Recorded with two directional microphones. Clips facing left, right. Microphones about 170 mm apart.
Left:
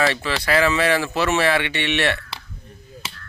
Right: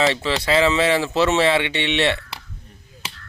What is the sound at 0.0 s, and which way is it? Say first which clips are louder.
Speech: right 2 dB; 20° right (ahead or behind).